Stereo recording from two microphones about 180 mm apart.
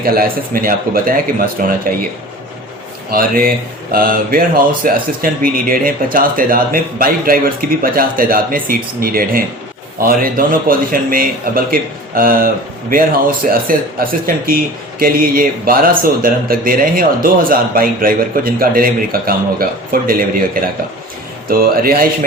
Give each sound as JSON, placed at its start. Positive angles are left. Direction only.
{"t": 0.0, "sound": "speech", "side_deg": -55}
{"t": 3.1, "sound": "speech", "side_deg": -55}